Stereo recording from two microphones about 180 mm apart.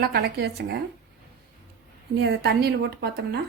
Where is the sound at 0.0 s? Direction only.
65° right (ahead or behind).